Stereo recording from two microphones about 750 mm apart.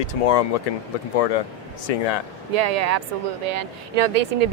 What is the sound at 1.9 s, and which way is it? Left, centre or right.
Speech, left.